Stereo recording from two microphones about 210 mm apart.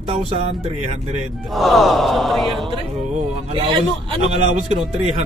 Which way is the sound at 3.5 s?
25° right (ahead or behind).